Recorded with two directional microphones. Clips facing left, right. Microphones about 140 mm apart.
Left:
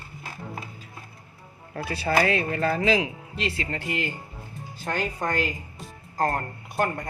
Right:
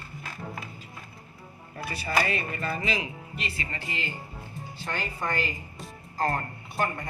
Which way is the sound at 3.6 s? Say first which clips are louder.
Left 6 dB; 55° left (ahead or behind).